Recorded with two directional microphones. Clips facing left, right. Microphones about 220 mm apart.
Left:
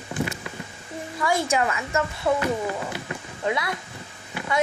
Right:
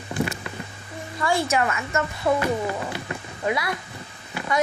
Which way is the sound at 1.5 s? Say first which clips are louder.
Even; 15° left (ahead or behind).